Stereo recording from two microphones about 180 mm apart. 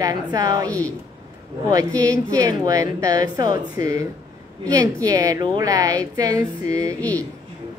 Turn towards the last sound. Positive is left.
turn(degrees=10)  # may be behind; listen again after turning